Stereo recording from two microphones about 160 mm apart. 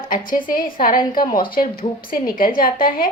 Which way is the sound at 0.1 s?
60° left (ahead or behind).